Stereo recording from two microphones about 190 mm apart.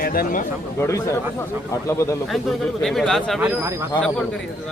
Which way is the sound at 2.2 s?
5° left (ahead or behind).